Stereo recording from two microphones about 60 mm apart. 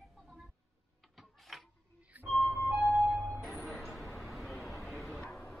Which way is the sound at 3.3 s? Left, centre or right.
Centre.